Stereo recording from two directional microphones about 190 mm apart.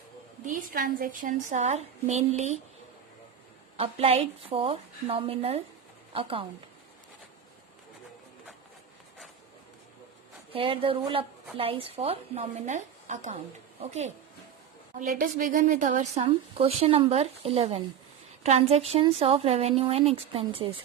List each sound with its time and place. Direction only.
0.4 s a woman's voice: 50° right (ahead or behind)
3.8 s a woman's voice: 30° right (ahead or behind)
10.5 s a woman's voice: 30° right (ahead or behind)